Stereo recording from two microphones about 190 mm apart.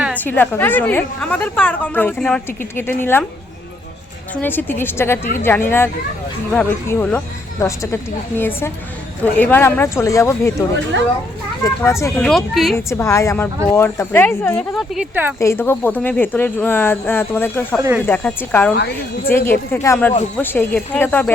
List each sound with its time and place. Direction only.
0.2 s a woman's voice: 10° left (ahead or behind)
4.4 s a woman's voice: 10° left (ahead or behind)
10.9 s a child's voice: 75° right (ahead or behind)
11.6 s a woman's voice: 15° left (ahead or behind)
12.7 s a woman's voice: 15° left (ahead or behind)
14.8 s speech: 5° right (ahead or behind)
15.4 s a woman's voice: 10° left (ahead or behind)
17.7 s speech: 15° right (ahead or behind)
18.0 s a woman's voice: 10° left (ahead or behind)